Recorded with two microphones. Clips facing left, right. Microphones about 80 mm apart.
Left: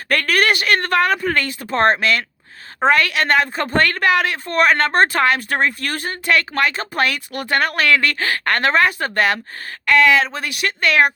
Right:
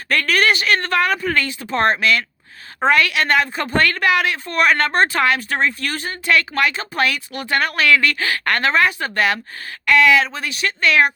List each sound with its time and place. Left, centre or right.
0.1 s a woman's voice: left